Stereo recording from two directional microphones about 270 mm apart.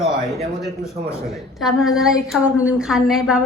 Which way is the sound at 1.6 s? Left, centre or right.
Centre.